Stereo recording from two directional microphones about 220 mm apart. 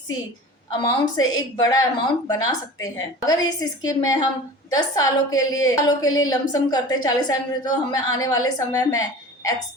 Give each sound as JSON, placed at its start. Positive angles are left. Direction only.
{"t": 1.0, "sound": "a woman's voice", "side_deg": 15}